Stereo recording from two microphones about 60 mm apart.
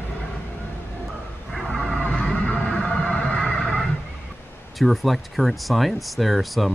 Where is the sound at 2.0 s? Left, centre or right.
Centre.